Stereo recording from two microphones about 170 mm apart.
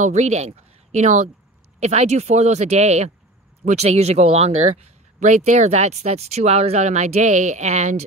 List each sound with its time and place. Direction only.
0.0 s speech: 40° right (ahead or behind)